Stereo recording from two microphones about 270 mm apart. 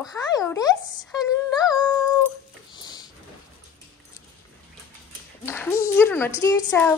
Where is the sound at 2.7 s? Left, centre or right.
Centre.